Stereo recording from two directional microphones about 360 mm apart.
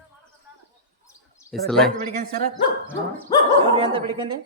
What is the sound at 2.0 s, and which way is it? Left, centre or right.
Speech, right.